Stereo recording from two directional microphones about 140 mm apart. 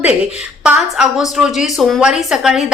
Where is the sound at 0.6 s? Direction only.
5° right (ahead or behind).